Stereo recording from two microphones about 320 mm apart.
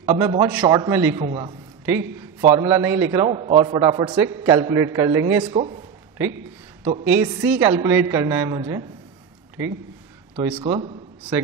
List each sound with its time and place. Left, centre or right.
0.0 s a man's voice: centre
6.1 s a man's voice: centre
10.3 s a man's voice: centre